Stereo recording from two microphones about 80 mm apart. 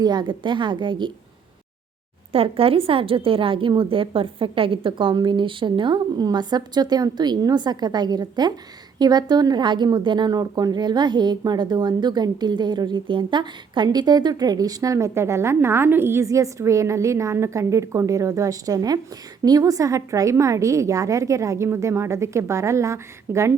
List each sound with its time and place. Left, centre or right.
0.0 s a woman's voice: right
3.2 s a woman's voice: right
5.1 s a woman's voice: right
6.2 s a woman's voice: right